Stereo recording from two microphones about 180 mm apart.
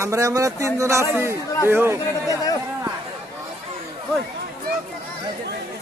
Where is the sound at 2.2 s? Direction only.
20° left (ahead or behind).